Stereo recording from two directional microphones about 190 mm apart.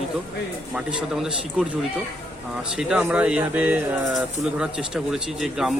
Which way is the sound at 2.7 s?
5° right (ahead or behind).